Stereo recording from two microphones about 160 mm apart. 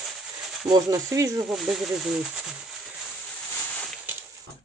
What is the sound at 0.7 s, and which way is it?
Speech, 20° right (ahead or behind).